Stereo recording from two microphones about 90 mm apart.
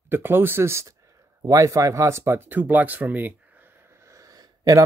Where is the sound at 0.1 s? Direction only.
25° right (ahead or behind).